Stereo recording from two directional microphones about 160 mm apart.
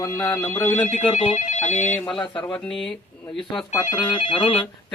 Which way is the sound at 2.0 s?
30° left (ahead or behind).